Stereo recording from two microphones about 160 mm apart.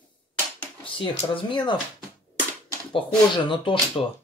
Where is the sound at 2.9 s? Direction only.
30° left (ahead or behind).